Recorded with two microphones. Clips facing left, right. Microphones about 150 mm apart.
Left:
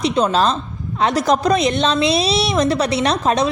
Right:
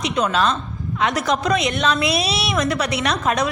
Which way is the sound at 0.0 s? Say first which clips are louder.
Left 3 dB; 30° left (ahead or behind).